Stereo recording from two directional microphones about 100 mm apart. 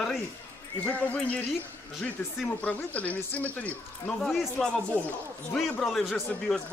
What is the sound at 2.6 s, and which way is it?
Speech, 15° left (ahead or behind).